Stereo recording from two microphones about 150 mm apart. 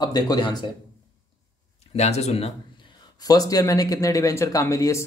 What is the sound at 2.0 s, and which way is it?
Speech, 45° left (ahead or behind).